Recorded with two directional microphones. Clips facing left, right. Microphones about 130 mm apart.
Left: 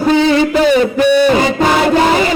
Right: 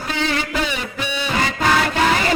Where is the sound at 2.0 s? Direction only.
15° left (ahead or behind).